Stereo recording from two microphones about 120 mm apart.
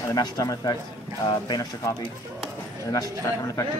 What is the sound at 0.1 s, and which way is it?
A man's voice, 30° left (ahead or behind).